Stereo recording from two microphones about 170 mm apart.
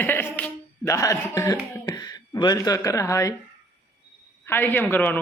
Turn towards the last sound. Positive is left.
turn(degrees=10)  # may be behind; listen again after turning